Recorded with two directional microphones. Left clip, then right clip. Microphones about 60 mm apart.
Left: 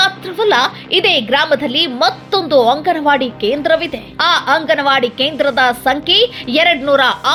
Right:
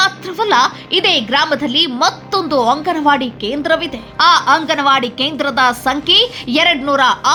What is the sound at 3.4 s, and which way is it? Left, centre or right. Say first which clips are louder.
A woman's voice: left 2 dB; left.